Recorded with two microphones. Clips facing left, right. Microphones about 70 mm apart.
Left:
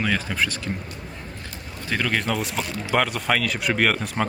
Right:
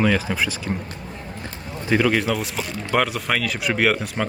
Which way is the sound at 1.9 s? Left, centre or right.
Centre.